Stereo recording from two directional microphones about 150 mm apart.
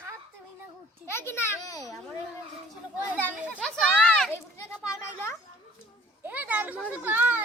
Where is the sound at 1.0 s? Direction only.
15° left (ahead or behind).